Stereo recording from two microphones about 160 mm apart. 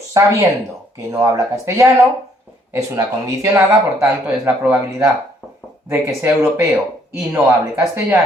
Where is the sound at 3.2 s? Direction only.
20° right (ahead or behind).